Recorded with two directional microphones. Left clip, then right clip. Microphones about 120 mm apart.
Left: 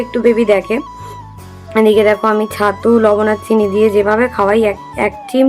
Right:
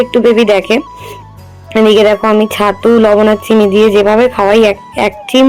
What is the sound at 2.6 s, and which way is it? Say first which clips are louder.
Music: right 1 dB; 45° right (ahead or behind).